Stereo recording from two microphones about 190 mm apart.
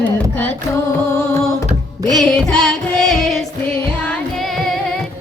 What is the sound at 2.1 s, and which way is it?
Music, centre (ahead or behind).